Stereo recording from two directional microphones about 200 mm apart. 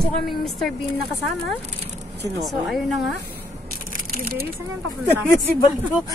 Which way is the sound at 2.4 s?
Centre (ahead or behind).